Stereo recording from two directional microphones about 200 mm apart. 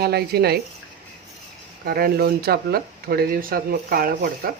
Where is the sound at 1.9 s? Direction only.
50° right (ahead or behind).